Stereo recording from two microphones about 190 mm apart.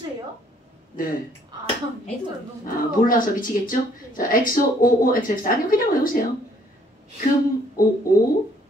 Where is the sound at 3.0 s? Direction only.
45° left (ahead or behind).